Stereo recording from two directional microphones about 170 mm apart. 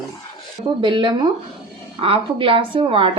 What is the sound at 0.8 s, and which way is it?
Speech, 30° right (ahead or behind).